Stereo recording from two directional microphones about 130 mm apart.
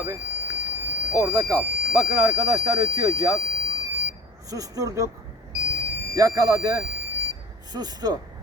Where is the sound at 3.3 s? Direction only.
25° left (ahead or behind).